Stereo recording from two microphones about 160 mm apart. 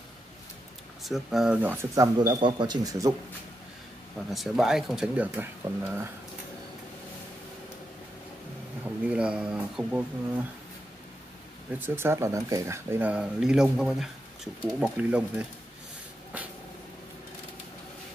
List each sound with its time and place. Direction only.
1.0 s speech: centre (ahead or behind)
2.1 s a man's voice: 30° right (ahead or behind)
4.3 s speech: centre (ahead or behind)
8.8 s speech: 5° right (ahead or behind)
11.8 s speech: 15° right (ahead or behind)